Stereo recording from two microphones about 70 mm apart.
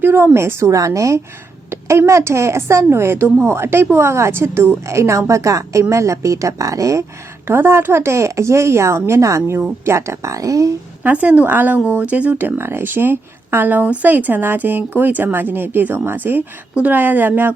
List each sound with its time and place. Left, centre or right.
0.0 s speech: right
7.4 s speech: right
11.0 s speech: centre